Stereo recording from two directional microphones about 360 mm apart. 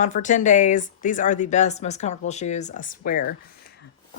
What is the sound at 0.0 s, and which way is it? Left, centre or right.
Speech, left.